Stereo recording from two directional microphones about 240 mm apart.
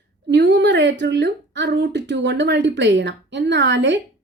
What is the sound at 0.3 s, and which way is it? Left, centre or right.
A woman's voice, right.